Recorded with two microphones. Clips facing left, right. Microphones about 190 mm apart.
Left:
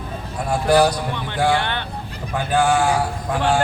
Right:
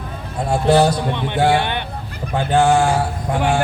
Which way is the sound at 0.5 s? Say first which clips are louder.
Right 2 dB; 25° right (ahead or behind).